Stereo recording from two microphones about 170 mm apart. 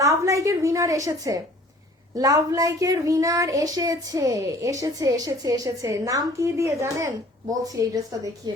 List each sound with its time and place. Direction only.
0.0 s a woman's voice: 20° right (ahead or behind)